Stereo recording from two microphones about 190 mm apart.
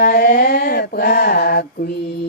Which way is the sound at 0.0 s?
50° left (ahead or behind).